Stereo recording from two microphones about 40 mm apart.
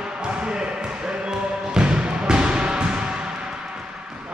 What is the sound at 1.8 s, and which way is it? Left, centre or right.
Basketball bounce, right.